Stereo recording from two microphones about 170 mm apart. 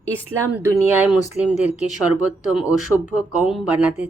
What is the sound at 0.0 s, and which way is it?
A woman's voice, 15° right (ahead or behind).